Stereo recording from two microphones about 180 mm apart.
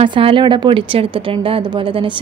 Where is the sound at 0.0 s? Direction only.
30° right (ahead or behind).